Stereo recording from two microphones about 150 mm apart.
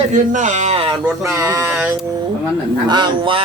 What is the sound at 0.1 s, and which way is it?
Speech, 55° right (ahead or behind).